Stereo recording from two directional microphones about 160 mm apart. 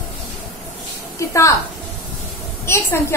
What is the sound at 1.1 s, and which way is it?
Speech, 20° left (ahead or behind).